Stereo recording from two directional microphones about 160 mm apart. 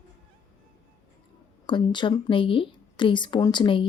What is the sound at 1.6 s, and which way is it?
Speech, 30° left (ahead or behind).